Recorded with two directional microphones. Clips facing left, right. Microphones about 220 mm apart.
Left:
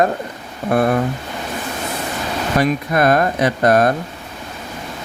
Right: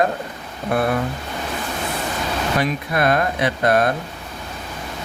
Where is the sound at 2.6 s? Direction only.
45° left (ahead or behind).